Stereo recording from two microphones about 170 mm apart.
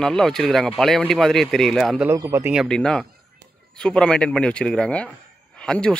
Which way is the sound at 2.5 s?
Centre (ahead or behind).